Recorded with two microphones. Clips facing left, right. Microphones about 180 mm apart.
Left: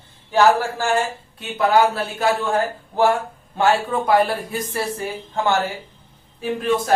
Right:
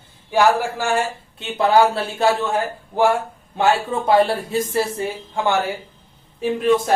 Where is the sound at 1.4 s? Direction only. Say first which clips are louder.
Right 1 dB; 25° right (ahead or behind).